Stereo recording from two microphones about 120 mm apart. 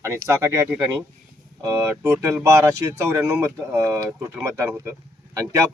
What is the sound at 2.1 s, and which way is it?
A man's voice, 20° right (ahead or behind).